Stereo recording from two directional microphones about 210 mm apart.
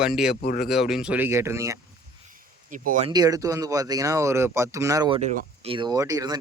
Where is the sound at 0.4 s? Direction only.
45° left (ahead or behind).